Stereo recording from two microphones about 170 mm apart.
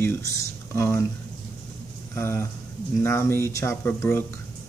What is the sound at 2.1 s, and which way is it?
A man's voice, 15° left (ahead or behind).